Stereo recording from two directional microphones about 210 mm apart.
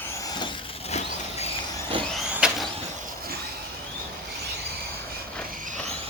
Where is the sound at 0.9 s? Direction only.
30° left (ahead or behind).